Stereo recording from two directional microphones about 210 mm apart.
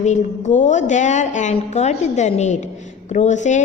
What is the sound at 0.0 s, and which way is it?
A woman's voice, 35° left (ahead or behind).